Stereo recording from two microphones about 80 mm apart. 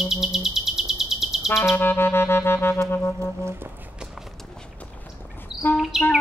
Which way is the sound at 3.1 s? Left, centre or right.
Right.